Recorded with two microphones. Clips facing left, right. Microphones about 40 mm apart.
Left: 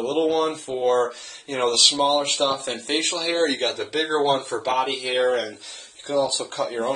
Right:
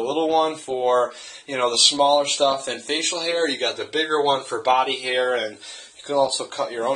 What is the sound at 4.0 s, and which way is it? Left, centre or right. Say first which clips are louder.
Speech: right 1 dB; right.